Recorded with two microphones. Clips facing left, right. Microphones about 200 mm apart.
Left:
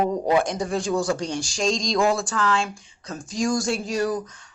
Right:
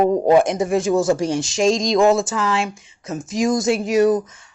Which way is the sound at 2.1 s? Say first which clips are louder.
Right 5 dB; 25° right (ahead or behind).